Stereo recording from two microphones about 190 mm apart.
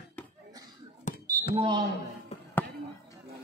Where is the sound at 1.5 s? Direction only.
25° right (ahead or behind).